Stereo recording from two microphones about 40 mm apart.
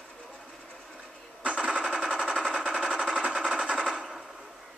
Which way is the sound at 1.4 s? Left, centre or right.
Centre.